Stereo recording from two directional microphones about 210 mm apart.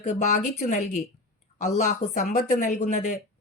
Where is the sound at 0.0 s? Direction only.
35° left (ahead or behind).